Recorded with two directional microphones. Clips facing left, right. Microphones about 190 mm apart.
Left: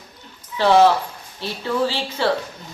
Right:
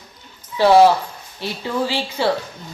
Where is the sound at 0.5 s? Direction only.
10° right (ahead or behind).